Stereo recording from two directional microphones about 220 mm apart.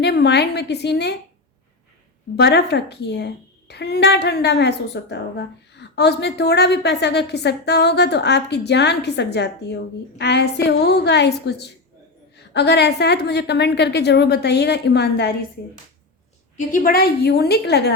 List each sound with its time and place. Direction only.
0.0 s a woman's voice: 50° left (ahead or behind)
2.3 s a woman's voice: 50° left (ahead or behind)
16.6 s a woman's voice: 40° left (ahead or behind)